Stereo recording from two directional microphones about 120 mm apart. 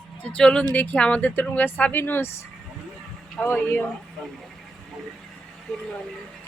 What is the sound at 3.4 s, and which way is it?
Speech, 20° left (ahead or behind).